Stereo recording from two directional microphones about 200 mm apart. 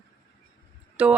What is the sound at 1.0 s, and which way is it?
Speech, 5° right (ahead or behind).